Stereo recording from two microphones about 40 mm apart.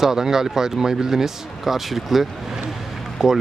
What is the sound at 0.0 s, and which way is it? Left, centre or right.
Speech, centre.